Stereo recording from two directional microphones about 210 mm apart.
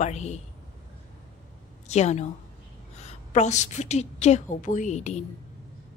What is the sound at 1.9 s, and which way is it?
A woman's voice, 30° left (ahead or behind).